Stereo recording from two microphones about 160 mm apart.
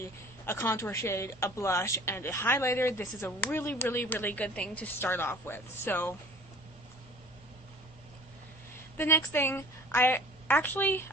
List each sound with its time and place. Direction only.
0.0 s speech: 15° left (ahead or behind)
9.0 s a woman's voice: 15° left (ahead or behind)